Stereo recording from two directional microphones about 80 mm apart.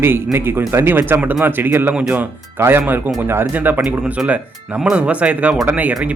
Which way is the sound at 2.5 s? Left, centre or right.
Right.